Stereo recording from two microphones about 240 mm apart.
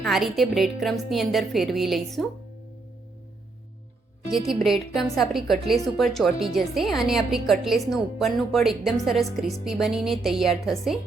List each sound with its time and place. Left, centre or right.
0.0 s speech: centre
4.3 s speech: centre